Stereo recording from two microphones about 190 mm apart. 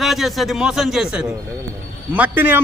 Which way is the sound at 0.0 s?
Centre (ahead or behind).